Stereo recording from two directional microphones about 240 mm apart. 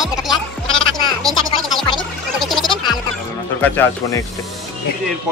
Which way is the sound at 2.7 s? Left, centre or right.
Centre.